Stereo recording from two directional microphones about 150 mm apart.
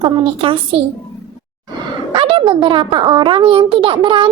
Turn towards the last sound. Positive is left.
turn(degrees=-35)  # may be behind; listen again after turning